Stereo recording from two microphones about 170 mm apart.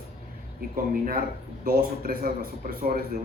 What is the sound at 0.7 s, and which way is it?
Speech, 60° right (ahead or behind).